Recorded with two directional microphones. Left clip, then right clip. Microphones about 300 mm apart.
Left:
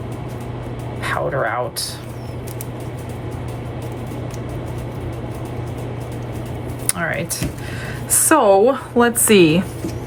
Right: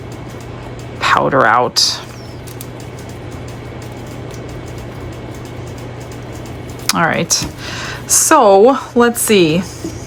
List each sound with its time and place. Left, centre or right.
1.0 s speech: centre
6.8 s a woman's voice: centre